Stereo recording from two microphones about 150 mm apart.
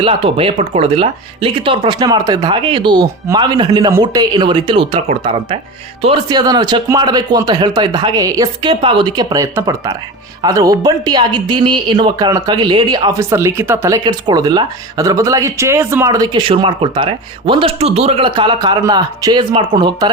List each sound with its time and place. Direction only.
0.0 s speech: 40° right (ahead or behind)
8.7 s speech: 35° right (ahead or behind)
13.1 s speech: 15° right (ahead or behind)